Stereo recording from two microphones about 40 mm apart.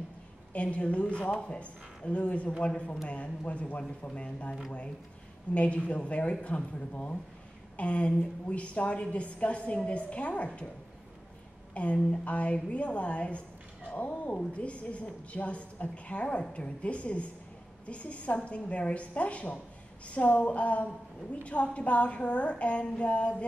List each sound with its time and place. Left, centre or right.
0.5 s a woman's voice: left
11.7 s a woman's voice: left